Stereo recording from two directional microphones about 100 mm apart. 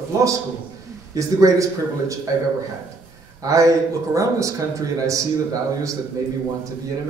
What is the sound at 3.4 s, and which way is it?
A man's voice, 35° right (ahead or behind).